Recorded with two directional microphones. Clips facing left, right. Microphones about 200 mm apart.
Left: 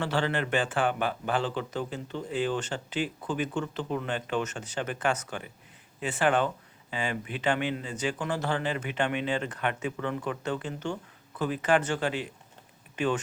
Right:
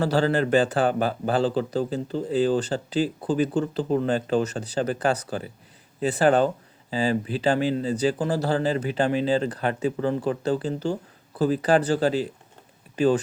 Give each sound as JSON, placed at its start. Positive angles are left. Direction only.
{"t": 0.0, "sound": "speech", "side_deg": -40}